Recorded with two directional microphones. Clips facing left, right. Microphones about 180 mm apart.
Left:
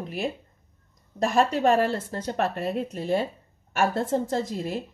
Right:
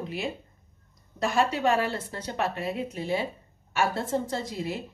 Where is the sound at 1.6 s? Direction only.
45° left (ahead or behind).